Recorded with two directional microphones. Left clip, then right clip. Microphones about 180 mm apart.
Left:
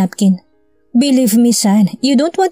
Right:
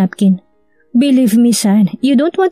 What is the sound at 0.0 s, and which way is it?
Speech, 35° left (ahead or behind).